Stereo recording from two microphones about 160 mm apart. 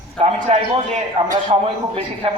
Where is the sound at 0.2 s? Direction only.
45° right (ahead or behind).